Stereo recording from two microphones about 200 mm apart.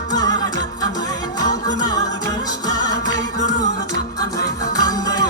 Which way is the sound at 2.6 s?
20° left (ahead or behind).